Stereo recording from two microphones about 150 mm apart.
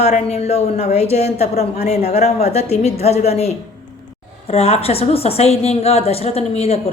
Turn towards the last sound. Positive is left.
turn(degrees=45)  # may be behind; listen again after turning